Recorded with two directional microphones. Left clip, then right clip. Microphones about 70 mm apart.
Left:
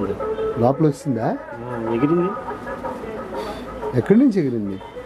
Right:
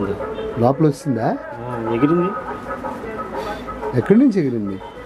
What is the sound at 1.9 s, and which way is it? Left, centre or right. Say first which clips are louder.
Speech: right 2 dB; centre.